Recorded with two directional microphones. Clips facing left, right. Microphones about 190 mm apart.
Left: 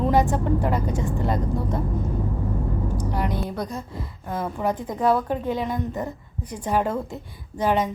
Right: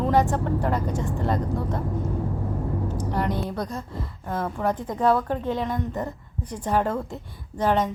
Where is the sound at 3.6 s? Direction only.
15° left (ahead or behind).